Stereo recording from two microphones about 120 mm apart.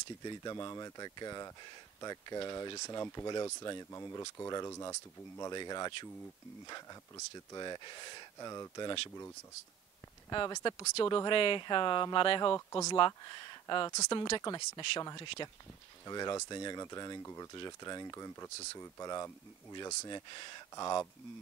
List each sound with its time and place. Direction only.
0.2 s speech: 35° left (ahead or behind)
10.3 s speech: 40° left (ahead or behind)
11.3 s speech: 45° left (ahead or behind)
12.5 s speech: 25° left (ahead or behind)
12.9 s speech: 40° left (ahead or behind)